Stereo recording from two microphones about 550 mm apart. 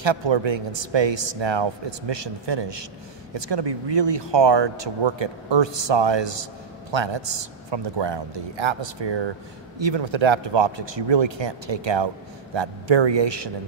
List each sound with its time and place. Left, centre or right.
0.0 s speech: right